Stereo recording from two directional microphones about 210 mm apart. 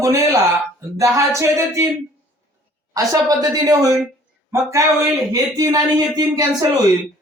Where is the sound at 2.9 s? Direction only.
15° right (ahead or behind).